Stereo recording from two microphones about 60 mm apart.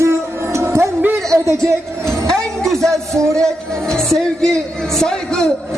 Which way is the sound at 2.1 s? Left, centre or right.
Centre.